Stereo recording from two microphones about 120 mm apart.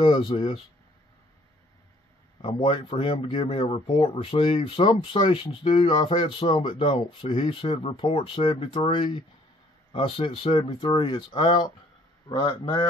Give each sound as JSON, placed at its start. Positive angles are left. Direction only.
{"t": 0.2, "sound": "speech", "side_deg": 45}
{"t": 2.4, "sound": "speech", "side_deg": 50}
{"t": 3.8, "sound": "speech", "side_deg": 50}